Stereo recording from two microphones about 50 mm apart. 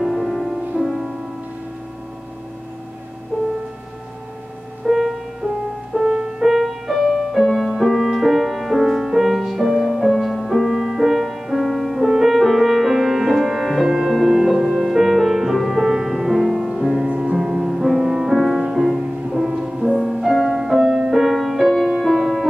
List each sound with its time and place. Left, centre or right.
0.0 s music: centre
3.3 s music: right
4.8 s music: centre
6.4 s music: centre
17.0 s music: centre